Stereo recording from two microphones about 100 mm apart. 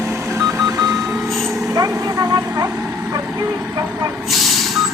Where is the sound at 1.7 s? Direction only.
35° right (ahead or behind).